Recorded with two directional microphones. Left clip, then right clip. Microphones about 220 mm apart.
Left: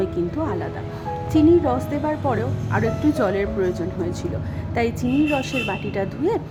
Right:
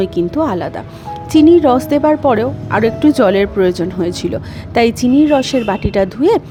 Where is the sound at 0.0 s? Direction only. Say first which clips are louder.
Right 8 dB; 35° right (ahead or behind).